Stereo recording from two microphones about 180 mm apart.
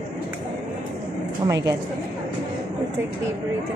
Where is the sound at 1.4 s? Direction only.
15° right (ahead or behind).